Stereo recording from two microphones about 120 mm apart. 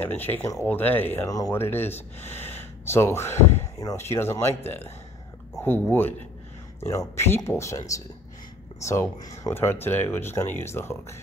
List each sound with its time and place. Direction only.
0.0 s speech: 15° left (ahead or behind)
1.2 s speech: 30° left (ahead or behind)
1.5 s speech: 20° left (ahead or behind)
3.4 s a sound: 20° left (ahead or behind)
3.9 s speech: 20° left (ahead or behind)
7.2 s speech: 20° left (ahead or behind)